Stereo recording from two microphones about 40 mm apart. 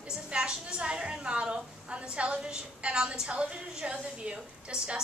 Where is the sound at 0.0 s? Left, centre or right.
Right.